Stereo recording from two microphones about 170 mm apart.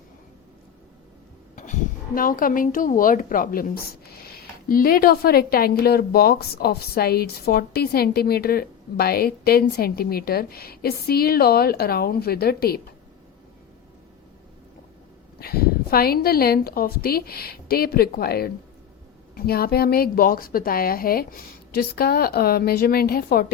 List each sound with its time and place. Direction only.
1.5 s a woman's voice: 45° left (ahead or behind); by 12.8 s 65° left (ahead or behind)
15.4 s a woman's voice: 65° left (ahead or behind)